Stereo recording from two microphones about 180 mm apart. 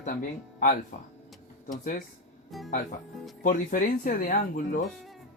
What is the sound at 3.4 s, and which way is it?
Speech, 45° left (ahead or behind).